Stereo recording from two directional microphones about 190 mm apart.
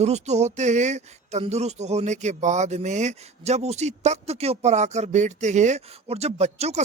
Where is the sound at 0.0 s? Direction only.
35° right (ahead or behind).